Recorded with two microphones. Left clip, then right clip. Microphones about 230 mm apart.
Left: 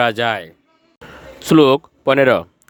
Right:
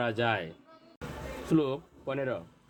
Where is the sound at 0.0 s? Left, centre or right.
Left.